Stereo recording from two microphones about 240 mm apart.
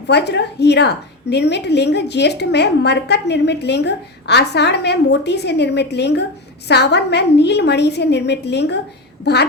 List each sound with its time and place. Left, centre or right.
0.1 s a woman's voice: left